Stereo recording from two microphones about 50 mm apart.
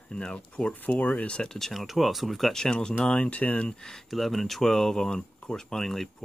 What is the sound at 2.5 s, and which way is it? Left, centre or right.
Speech, centre.